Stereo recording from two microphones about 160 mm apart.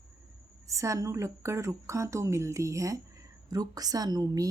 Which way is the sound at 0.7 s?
20° right (ahead or behind).